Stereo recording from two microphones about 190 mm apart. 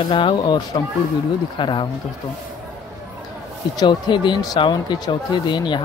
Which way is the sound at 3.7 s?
25° left (ahead or behind).